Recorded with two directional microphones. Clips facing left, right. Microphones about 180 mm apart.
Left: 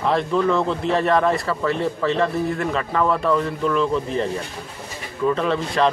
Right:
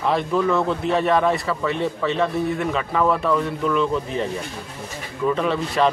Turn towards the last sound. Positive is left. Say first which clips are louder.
# even
turn(degrees=-5)  # may be behind; listen again after turning